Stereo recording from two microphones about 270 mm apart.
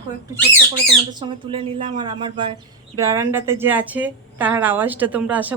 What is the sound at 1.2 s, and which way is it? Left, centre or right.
A woman's voice, centre.